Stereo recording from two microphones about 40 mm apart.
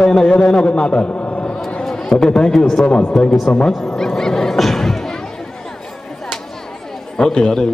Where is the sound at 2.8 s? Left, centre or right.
Left.